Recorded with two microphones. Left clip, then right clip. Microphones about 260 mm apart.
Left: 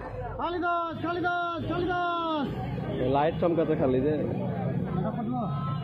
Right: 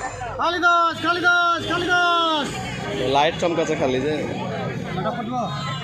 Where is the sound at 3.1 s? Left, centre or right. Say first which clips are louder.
Right 6 dB; centre.